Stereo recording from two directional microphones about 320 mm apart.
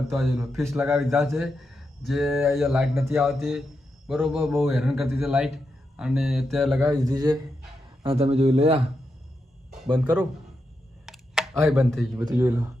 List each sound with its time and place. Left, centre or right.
0.1 s speech: centre
11.0 s a sound: centre
12.3 s speech: centre